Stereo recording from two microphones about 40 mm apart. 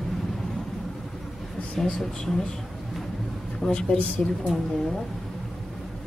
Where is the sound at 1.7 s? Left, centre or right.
Centre.